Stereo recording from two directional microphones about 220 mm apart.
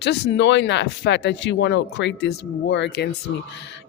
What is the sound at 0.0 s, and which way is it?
Speech, 50° left (ahead or behind).